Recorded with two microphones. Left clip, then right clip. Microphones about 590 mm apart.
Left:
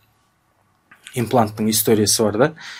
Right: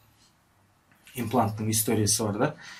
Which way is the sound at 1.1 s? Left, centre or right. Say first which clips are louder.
Left 8 dB; left.